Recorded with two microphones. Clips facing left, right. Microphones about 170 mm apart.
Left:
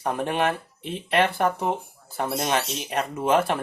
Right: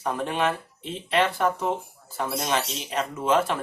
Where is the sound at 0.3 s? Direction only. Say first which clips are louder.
Left 1 dB; 55° left (ahead or behind).